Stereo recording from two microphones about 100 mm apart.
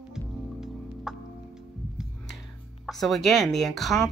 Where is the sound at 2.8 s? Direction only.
Centre (ahead or behind).